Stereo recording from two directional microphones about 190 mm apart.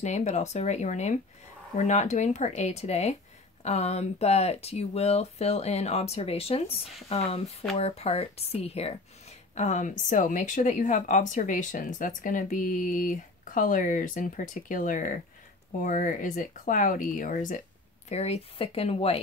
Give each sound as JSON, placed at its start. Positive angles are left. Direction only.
{"t": 0.0, "sound": "speech", "side_deg": 35}